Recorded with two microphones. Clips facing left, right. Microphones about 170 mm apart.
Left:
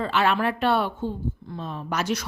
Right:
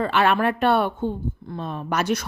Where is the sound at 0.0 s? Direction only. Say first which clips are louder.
Right 3 dB; 60° right (ahead or behind).